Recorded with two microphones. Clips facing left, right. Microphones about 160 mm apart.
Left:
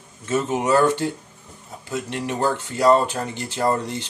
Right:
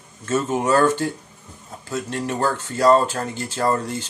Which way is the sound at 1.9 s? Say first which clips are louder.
Right 1 dB; 15° left (ahead or behind).